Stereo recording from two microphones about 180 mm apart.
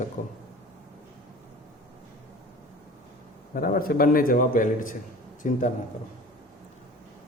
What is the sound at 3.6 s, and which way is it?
A man's voice, 55° left (ahead or behind).